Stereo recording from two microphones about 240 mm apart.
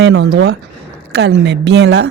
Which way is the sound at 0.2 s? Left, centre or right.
Right.